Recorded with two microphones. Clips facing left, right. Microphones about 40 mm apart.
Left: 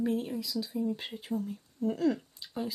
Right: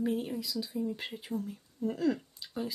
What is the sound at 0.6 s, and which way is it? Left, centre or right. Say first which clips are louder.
A woman's voice: left 2 dB; centre.